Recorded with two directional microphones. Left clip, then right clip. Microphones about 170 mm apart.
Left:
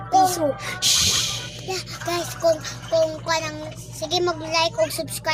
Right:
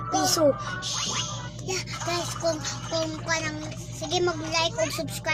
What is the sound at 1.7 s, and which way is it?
Speech, 30° left (ahead or behind).